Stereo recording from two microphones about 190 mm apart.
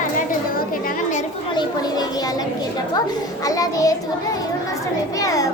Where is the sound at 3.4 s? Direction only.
20° left (ahead or behind).